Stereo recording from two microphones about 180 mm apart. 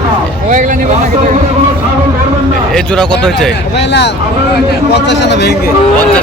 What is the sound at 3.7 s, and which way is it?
A man's voice, 70° left (ahead or behind).